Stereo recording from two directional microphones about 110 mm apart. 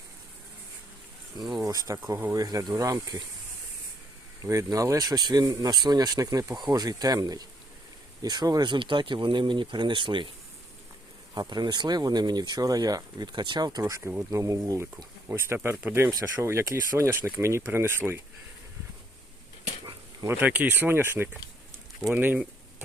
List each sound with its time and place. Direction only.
1.6 s speech: 30° right (ahead or behind)
2.3 s speech: 30° right (ahead or behind)
4.4 s speech: 30° right (ahead or behind); by 10.2 s 50° right (ahead or behind)
11.3 s speech: 40° right (ahead or behind)
14.0 s speech: 15° right (ahead or behind)
14.3 s speech: 30° right (ahead or behind)
15.3 s speech: 20° right (ahead or behind)
20.2 s speech: 20° right (ahead or behind)